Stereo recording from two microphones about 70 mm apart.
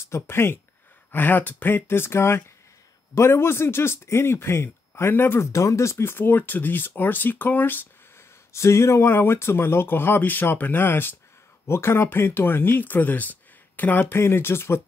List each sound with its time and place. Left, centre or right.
0.1 s a man's voice: left
8.5 s a man's voice: left